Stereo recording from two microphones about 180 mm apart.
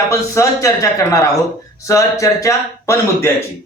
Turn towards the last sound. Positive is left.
turn(degrees=15)  # may be behind; listen again after turning